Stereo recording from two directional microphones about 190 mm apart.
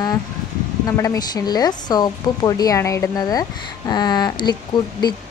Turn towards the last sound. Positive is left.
turn(degrees=20)  # may be behind; listen again after turning